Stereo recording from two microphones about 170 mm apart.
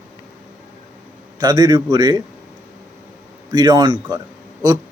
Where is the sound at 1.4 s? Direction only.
25° right (ahead or behind).